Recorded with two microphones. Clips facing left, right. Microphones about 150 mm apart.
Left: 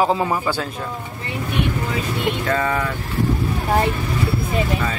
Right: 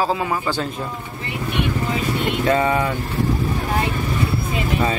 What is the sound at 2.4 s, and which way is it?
Speech, 20° right (ahead or behind).